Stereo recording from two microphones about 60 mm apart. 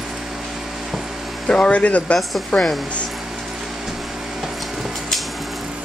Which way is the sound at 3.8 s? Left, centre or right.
Centre.